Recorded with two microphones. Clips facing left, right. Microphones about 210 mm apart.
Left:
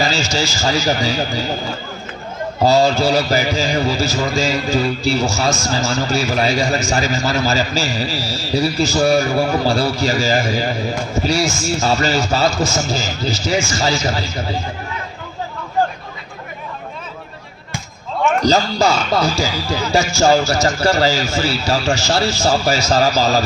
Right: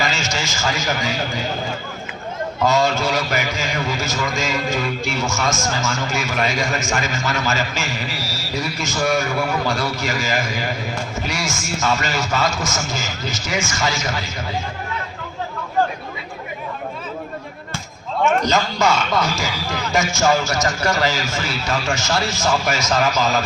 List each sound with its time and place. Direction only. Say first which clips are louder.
0.0 s a man's voice: left 5 dB; 35° left (ahead or behind)
2.6 s a man's voice: left 5 dB; 35° left (ahead or behind)
18.4 s a man's voice: left 4 dB; 35° left (ahead or behind)